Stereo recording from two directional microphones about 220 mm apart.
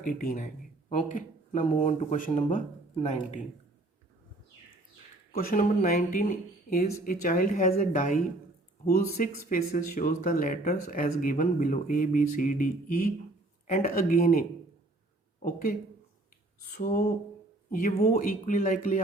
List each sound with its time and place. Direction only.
0.0 s speech: 40° left (ahead or behind)
5.3 s speech: 40° left (ahead or behind)
16.7 s speech: 40° left (ahead or behind)